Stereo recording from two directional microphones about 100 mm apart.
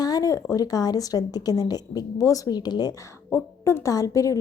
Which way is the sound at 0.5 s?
40° left (ahead or behind).